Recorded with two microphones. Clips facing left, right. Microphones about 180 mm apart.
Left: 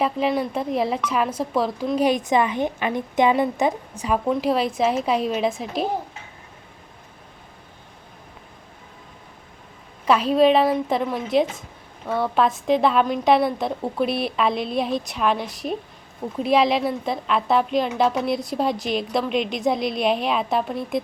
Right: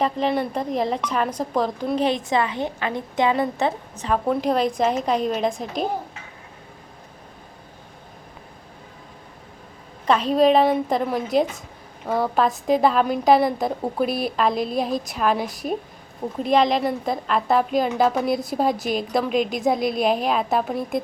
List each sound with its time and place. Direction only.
0.0 s a woman's voice: 5° left (ahead or behind)
10.1 s a woman's voice: 5° left (ahead or behind)
12.0 s a woman's voice: 35° right (ahead or behind)
12.3 s a woman's voice: centre (ahead or behind)